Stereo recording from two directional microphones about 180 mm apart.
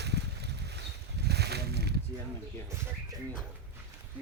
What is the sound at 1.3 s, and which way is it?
Slosh, 65° right (ahead or behind).